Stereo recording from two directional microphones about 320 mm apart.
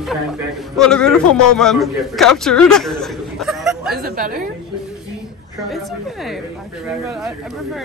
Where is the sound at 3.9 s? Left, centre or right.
Right.